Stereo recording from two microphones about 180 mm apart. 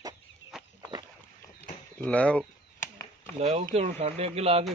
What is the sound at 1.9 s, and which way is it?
Speech, 10° left (ahead or behind).